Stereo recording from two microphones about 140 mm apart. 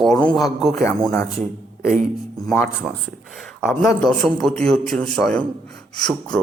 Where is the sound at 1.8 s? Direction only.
90° right.